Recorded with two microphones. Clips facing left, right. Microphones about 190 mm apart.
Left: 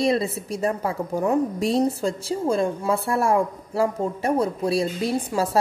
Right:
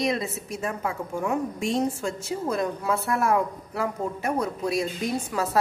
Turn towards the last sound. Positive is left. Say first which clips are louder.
# left 4 dB
turn(degrees=30)  # may be behind; listen again after turning